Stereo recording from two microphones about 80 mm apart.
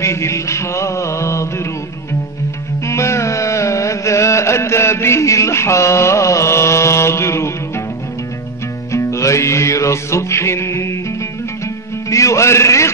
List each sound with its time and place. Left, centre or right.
0.0 s music: left
2.9 s music: left
8.9 s music: left
12.1 s a man's voice: left